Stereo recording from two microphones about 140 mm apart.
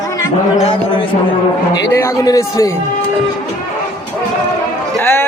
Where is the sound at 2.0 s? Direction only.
25° left (ahead or behind).